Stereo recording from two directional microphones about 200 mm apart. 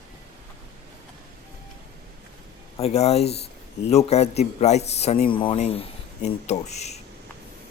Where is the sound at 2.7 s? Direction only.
30° left (ahead or behind).